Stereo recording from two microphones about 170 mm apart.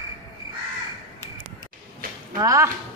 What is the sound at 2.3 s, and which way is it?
Speech, 20° right (ahead or behind).